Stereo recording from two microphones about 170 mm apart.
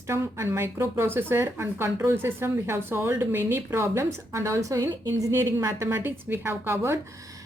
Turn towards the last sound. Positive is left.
turn(degrees=-15)  # may be behind; listen again after turning